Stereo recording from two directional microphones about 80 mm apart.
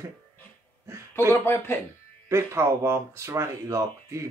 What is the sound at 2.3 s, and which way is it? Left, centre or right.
Speech, right.